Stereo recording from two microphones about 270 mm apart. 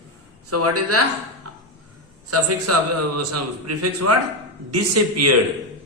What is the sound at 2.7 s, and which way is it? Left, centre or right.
A man's voice, right.